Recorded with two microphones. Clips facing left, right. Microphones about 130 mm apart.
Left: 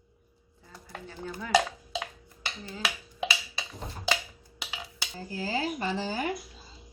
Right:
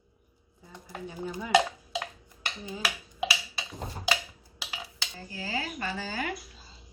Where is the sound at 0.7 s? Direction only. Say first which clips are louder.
Right 3 dB; 15° right (ahead or behind).